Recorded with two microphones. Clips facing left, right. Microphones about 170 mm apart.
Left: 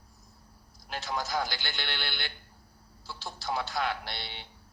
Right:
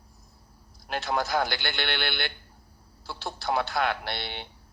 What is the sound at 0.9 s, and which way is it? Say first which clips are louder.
A man's voice: right 6 dB; 65° right (ahead or behind).